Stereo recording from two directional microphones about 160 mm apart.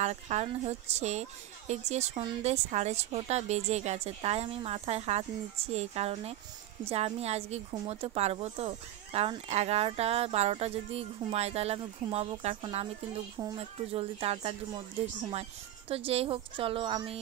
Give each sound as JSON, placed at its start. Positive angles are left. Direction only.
{"t": 0.0, "sound": "speech", "side_deg": -45}
{"t": 15.9, "sound": "speech", "side_deg": -35}